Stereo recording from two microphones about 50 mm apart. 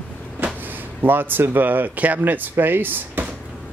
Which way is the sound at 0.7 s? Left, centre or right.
Right.